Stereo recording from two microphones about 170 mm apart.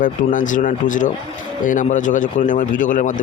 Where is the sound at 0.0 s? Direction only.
50° left (ahead or behind).